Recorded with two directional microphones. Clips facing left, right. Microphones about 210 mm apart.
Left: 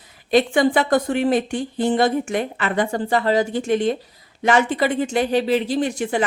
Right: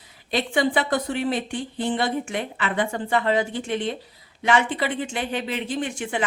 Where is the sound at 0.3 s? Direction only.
45° left (ahead or behind).